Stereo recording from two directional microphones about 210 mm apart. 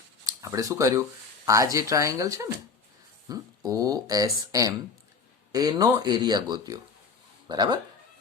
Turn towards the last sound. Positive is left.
turn(degrees=-20)  # may be behind; listen again after turning